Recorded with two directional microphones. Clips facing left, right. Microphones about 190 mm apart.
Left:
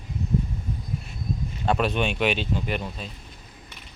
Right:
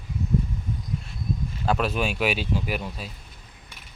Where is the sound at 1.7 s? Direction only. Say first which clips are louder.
Left 1 dB; centre (ahead or behind).